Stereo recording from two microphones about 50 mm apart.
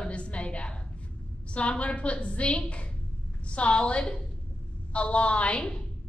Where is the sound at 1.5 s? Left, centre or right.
Left.